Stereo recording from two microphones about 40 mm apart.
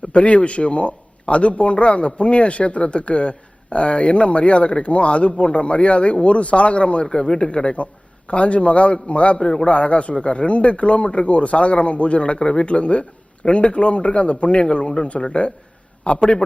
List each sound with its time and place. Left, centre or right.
0.1 s speech: left